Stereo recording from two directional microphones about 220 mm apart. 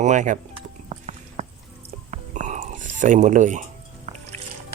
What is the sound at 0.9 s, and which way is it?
Clip-clop, 35° right (ahead or behind).